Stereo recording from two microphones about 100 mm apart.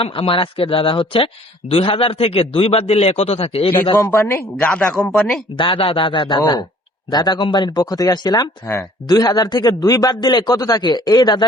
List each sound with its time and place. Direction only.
0.0 s a man's voice: 60° left (ahead or behind)
3.9 s a man's voice: 30° left (ahead or behind)
5.1 s speech: centre (ahead or behind)
5.5 s a man's voice: 60° left (ahead or behind); by 11.4 s 45° left (ahead or behind)